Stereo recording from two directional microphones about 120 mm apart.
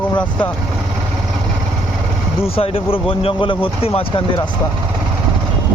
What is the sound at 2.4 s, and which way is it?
Speech, 55° left (ahead or behind).